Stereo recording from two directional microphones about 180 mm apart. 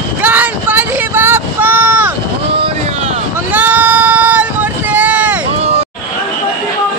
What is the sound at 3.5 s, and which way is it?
Child singing, 10° right (ahead or behind).